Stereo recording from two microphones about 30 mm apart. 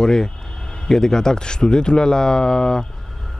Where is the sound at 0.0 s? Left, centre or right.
Centre.